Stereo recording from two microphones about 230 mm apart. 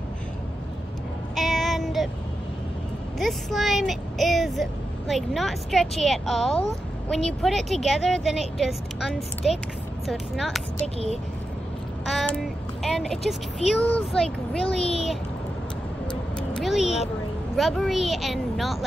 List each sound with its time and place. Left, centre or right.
1.3 s child singing: centre
3.2 s speech: centre
12.1 s a child's voice: centre
14.6 s a child's voice: left
16.3 s vehicle: centre
17.6 s speech: centre